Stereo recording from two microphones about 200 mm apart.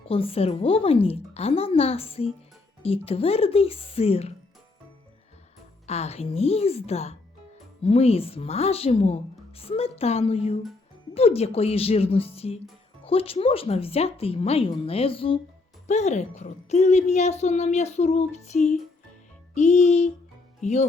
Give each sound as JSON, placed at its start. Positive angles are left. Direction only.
{"t": 0.1, "sound": "speech", "side_deg": 30}
{"t": 5.8, "sound": "a woman's voice", "side_deg": 30}